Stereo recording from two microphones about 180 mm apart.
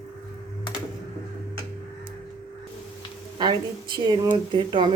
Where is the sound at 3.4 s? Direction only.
25° right (ahead or behind).